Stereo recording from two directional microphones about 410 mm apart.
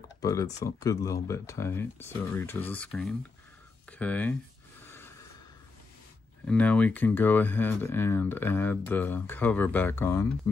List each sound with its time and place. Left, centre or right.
0.2 s speech: centre
4.8 s gasp: centre
6.4 s speech: centre